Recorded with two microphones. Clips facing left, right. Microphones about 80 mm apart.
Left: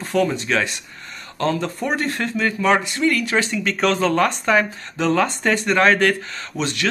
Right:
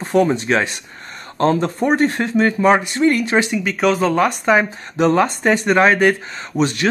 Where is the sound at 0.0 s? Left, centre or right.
Right.